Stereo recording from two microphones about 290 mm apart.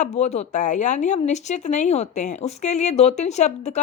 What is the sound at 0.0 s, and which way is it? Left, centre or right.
A woman's voice, left.